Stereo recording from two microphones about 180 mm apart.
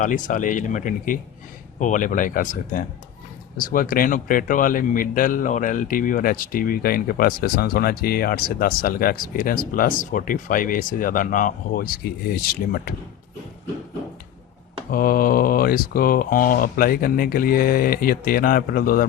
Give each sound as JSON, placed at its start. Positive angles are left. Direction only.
{"t": 0.0, "sound": "a man's voice", "side_deg": 45}
{"t": 14.8, "sound": "a man's voice", "side_deg": 50}